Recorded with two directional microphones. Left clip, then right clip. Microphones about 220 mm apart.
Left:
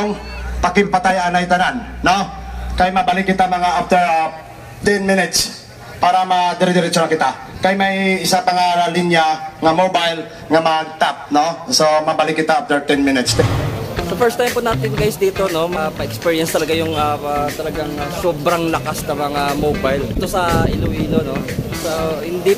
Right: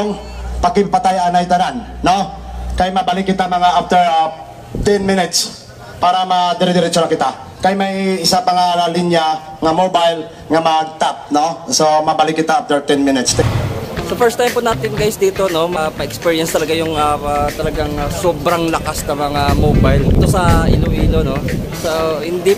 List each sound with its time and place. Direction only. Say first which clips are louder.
0.6 s a man's voice: right 2 dB; 40° right (ahead or behind)
2.8 s speech: even; 5° right (ahead or behind)
3.3 s a man's voice: right 2 dB; 10° left (ahead or behind)
5.9 s a man's voice: right 1 dB; 5° left (ahead or behind); by 13.2 s 20° right (ahead or behind)
13.9 s a man's voice: right 2 dB; 5° right (ahead or behind)